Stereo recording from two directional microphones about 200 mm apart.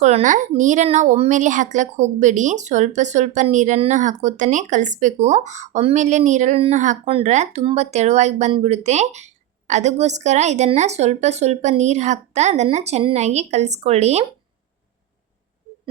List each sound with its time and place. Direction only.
0.0 s a woman's voice: 35° right (ahead or behind)